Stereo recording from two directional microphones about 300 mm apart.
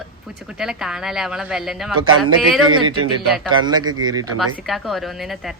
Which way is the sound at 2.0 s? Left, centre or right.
Right.